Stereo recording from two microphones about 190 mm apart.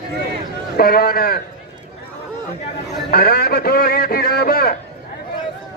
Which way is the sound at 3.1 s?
55° left (ahead or behind).